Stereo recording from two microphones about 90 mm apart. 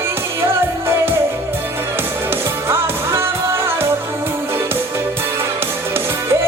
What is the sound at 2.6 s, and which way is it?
Music, 30° right (ahead or behind).